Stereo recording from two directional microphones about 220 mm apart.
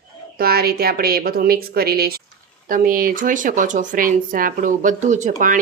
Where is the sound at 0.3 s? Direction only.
45° right (ahead or behind).